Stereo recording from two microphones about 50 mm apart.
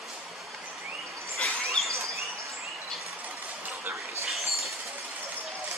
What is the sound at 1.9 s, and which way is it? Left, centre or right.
Bird, right.